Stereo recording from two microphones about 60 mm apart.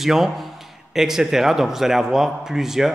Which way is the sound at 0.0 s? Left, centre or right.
Centre.